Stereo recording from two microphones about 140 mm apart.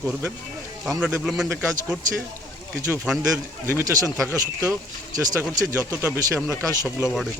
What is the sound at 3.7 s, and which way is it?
Speech, 20° right (ahead or behind).